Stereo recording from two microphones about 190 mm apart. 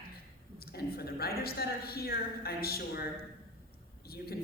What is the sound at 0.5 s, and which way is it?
A man's voice, 55° left (ahead or behind).